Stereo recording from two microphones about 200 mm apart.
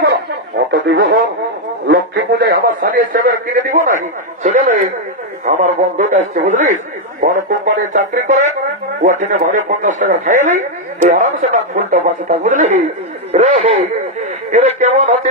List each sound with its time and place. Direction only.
0.7 s a man's voice: 55° right (ahead or behind); by 15.1 s 35° right (ahead or behind)